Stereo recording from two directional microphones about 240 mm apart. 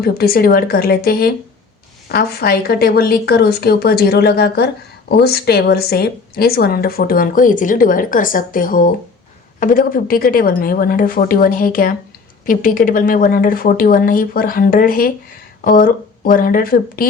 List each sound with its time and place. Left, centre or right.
0.0 s a woman's voice: left